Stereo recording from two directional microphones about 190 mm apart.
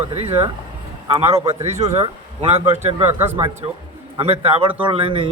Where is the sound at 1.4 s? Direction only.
35° right (ahead or behind).